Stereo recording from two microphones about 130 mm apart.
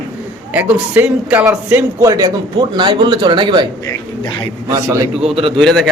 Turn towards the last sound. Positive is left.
turn(degrees=0)  # may be behind; listen again after turning